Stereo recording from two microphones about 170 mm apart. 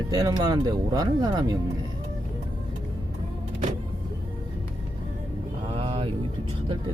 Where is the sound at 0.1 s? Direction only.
20° right (ahead or behind).